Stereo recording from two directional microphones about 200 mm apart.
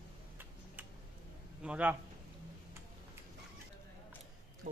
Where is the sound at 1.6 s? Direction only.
5° right (ahead or behind).